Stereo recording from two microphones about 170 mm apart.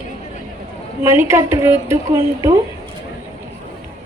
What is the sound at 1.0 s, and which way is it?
A woman's voice, 15° right (ahead or behind).